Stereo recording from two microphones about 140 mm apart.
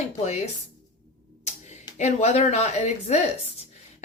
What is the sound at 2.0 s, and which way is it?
Speech, 50° left (ahead or behind).